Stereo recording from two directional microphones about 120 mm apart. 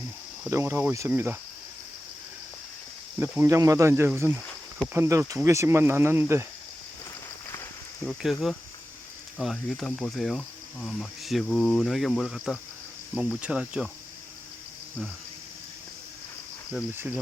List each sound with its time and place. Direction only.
0.5 s speech: 20° right (ahead or behind)
3.4 s speech: 30° right (ahead or behind)
8.0 s speech: centre (ahead or behind)